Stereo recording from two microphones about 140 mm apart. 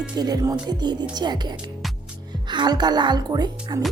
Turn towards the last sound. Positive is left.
turn(degrees=-30)  # may be behind; listen again after turning